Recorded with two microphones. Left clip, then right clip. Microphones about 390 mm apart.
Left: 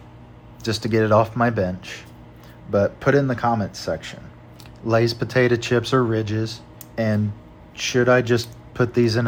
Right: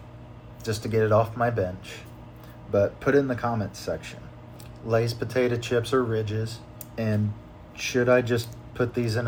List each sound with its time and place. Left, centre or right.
0.6 s speech: left